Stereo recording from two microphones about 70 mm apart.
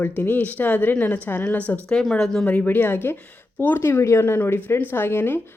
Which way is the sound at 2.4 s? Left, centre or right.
Left.